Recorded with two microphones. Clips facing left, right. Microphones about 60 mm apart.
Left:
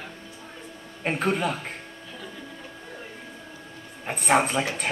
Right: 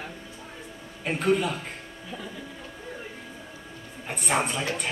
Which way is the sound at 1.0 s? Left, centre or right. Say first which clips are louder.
Right 1 dB; left.